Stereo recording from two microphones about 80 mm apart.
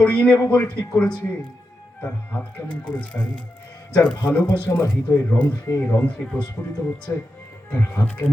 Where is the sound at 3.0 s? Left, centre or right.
Left.